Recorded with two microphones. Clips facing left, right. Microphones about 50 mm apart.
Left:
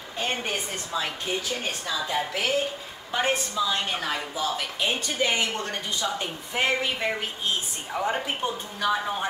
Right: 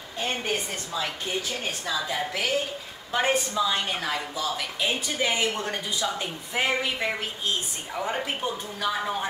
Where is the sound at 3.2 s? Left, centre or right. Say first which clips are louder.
Right 1 dB; centre.